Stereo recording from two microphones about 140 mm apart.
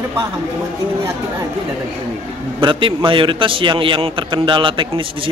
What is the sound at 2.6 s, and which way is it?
A man's voice, 35° right (ahead or behind).